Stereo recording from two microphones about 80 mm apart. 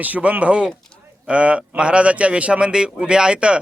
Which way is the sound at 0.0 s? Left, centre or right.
Centre.